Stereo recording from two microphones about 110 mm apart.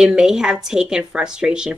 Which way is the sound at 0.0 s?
5° right (ahead or behind).